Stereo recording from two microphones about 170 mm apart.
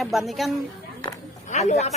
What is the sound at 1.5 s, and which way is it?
Speech, 45° left (ahead or behind).